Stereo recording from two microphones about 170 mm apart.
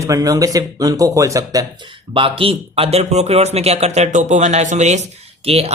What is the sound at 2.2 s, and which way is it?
Speech, 30° right (ahead or behind).